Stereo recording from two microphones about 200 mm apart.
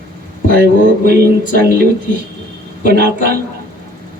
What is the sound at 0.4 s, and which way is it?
Speech, 50° right (ahead or behind).